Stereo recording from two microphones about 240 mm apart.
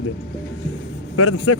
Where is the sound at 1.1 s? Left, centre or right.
Left.